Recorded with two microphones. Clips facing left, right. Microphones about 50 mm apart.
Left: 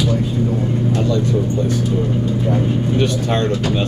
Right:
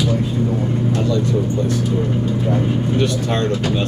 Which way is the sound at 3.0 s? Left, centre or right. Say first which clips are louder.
Left 1 dB; left.